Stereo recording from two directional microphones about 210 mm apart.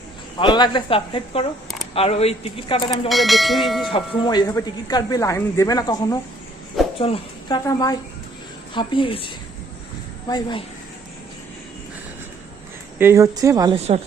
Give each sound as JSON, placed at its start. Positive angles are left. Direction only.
{"t": 0.3, "sound": "a man's voice", "side_deg": 20}
{"t": 3.1, "sound": "church bell", "side_deg": 0}
{"t": 4.2, "sound": "a man's voice", "side_deg": 20}
{"t": 13.0, "sound": "speech", "side_deg": -15}
{"t": 13.7, "sound": "speech", "side_deg": -30}